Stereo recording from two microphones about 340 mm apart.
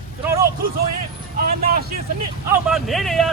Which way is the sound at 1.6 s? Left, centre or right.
Right.